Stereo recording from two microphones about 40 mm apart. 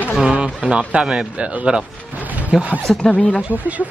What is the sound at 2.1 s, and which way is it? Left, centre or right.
Music, right.